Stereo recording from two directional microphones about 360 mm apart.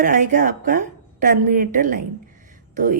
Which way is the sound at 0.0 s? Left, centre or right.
Right.